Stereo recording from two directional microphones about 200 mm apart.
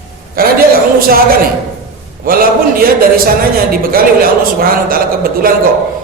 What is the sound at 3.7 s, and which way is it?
A man's voice, 45° right (ahead or behind).